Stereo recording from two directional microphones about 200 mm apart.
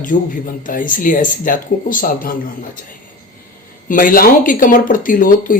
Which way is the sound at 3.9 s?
45° left (ahead or behind).